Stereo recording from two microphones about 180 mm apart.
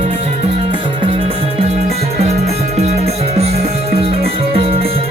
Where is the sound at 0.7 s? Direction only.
30° right (ahead or behind).